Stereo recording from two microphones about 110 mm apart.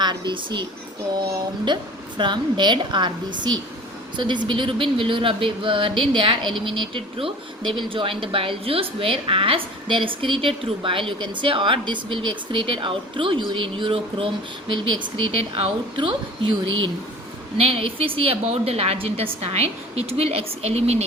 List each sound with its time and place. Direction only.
0.0 s speech: 45° right (ahead or behind)
15.5 s a woman's voice: 55° right (ahead or behind)
17.6 s a woman's voice: 60° right (ahead or behind); by 21.0 s 75° right (ahead or behind)